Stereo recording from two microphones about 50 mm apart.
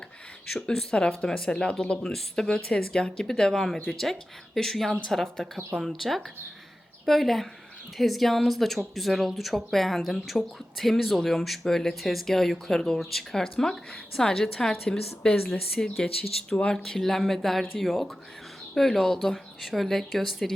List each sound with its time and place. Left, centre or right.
0.5 s speech: centre
0.9 s speech: centre
16.5 s speech: left
16.7 s speech: centre